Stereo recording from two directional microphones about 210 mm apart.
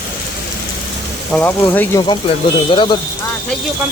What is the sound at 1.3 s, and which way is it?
Speech, 10° left (ahead or behind).